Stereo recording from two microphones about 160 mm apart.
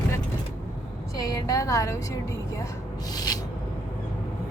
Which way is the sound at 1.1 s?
20° left (ahead or behind).